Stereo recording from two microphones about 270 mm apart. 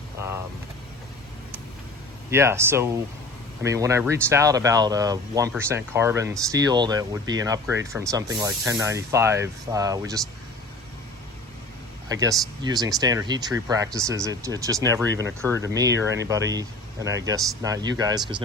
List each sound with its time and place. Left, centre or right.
0.2 s vehicle: centre
2.3 s speech: centre
12.0 s speech: centre
15.9 s speech: right
16.5 s speech: centre